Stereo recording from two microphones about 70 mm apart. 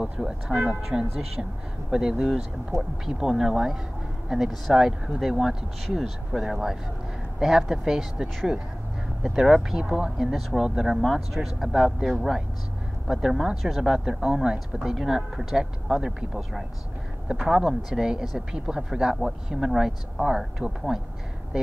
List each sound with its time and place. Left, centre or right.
0.0 s speech: centre
2.7 s speech: right
3.2 s speech: centre